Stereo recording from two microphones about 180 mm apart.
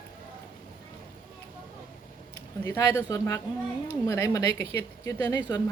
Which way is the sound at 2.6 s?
15° left (ahead or behind).